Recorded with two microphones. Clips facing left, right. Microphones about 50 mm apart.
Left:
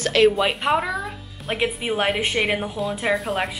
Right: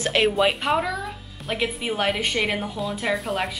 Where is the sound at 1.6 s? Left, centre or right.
Centre.